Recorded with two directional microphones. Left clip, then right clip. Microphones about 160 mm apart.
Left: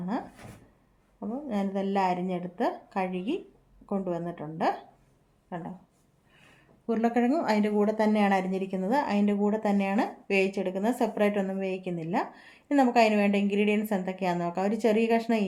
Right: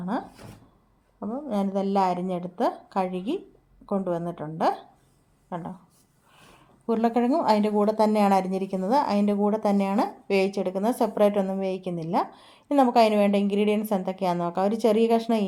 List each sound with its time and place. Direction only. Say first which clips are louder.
1.2 s a woman's voice: right 4 dB; 30° right (ahead or behind)
6.8 s a woman's voice: right 3 dB; 25° right (ahead or behind)